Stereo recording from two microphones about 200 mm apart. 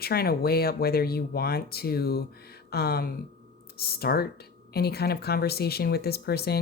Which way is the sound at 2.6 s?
50° left (ahead or behind).